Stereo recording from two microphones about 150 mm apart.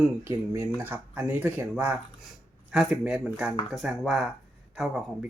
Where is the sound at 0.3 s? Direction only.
15° right (ahead or behind).